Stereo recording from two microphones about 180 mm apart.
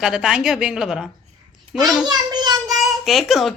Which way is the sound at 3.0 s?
Centre (ahead or behind).